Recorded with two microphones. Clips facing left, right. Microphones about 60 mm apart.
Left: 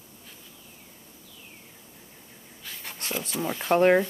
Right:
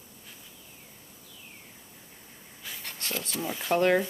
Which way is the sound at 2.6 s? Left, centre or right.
Centre.